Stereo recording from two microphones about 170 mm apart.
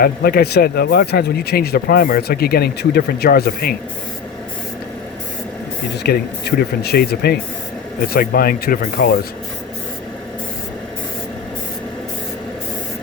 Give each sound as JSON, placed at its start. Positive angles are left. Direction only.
{"t": 0.0, "sound": "speech", "side_deg": 65}
{"t": 6.0, "sound": "speech", "side_deg": 70}